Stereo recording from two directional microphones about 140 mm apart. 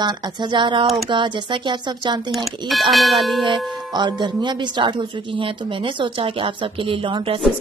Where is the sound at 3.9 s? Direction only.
30° right (ahead or behind).